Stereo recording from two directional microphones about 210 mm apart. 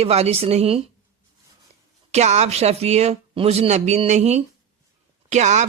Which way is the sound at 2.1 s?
30° right (ahead or behind).